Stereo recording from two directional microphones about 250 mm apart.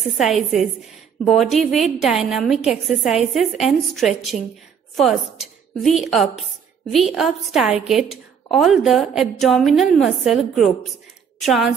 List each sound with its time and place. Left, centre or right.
0.2 s a woman's voice: centre